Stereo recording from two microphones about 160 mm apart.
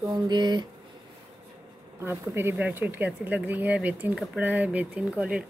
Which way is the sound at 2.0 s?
15° right (ahead or behind).